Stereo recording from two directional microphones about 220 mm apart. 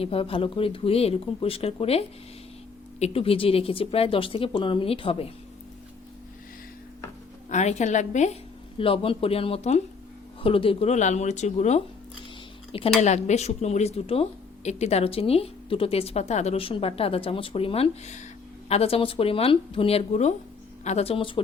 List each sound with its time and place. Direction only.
0.0 s speech: 25° left (ahead or behind)
7.5 s speech: 30° left (ahead or behind)